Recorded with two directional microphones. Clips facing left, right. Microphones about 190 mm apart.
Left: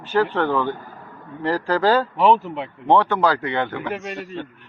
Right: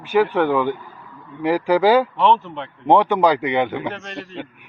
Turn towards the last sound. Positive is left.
turn(degrees=10)  # may be behind; listen again after turning